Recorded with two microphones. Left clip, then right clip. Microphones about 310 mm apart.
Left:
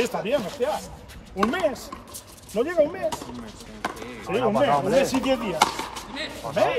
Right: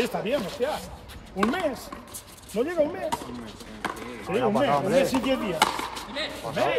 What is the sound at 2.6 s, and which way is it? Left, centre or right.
Speech, left.